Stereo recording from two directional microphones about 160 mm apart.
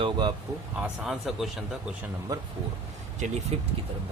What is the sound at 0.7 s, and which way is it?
Speech, 5° right (ahead or behind).